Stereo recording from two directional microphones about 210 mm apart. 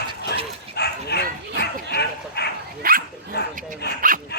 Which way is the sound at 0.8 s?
50° left (ahead or behind).